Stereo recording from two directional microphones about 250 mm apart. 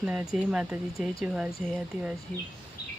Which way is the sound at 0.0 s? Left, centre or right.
Centre.